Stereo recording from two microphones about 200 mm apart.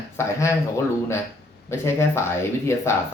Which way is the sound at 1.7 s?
15° left (ahead or behind).